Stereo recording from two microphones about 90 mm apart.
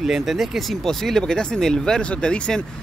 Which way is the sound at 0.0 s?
5° right (ahead or behind).